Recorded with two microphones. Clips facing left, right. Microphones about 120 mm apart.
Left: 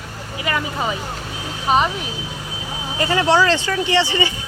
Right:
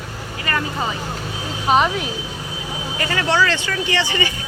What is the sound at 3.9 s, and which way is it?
Speech, 25° left (ahead or behind).